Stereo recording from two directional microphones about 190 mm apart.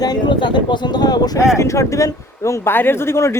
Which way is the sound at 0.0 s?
25° left (ahead or behind).